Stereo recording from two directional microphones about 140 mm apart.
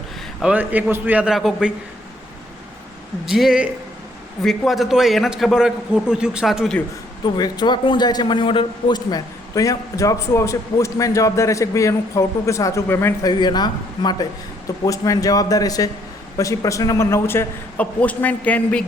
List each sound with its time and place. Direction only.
0.4 s a man's voice: 10° right (ahead or behind)
3.2 s a man's voice: centre (ahead or behind)
7.3 s a man's voice: 30° left (ahead or behind)
13.2 s a man's voice: 30° left (ahead or behind); by 18.9 s 10° left (ahead or behind)